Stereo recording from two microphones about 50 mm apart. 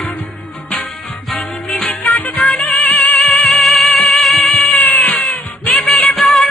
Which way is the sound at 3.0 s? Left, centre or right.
Left.